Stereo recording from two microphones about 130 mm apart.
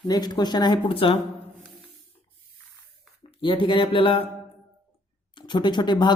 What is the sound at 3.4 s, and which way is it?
Speech, 40° left (ahead or behind).